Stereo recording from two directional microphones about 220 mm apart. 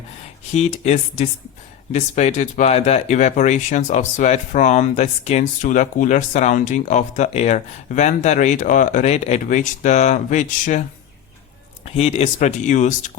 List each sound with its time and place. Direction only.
0.5 s speech: 30° left (ahead or behind)
11.9 s speech: 30° left (ahead or behind)